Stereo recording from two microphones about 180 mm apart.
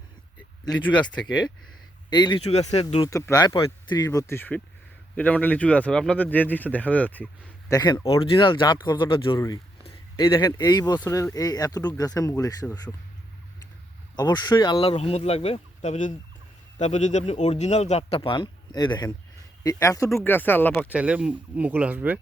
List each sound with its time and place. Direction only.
0.6 s speech: 25° left (ahead or behind)
2.4 s speech: 35° left (ahead or behind)
3.0 s speech: 15° left (ahead or behind)
8.2 s speech: 30° left (ahead or behind)
14.2 s speech: 20° left (ahead or behind)
20.9 s speech: 5° right (ahead or behind)